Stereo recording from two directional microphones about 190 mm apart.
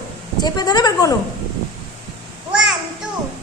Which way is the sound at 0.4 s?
20° left (ahead or behind).